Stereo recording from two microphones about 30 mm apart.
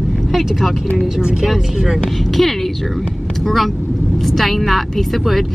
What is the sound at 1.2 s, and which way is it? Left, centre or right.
Speech, right.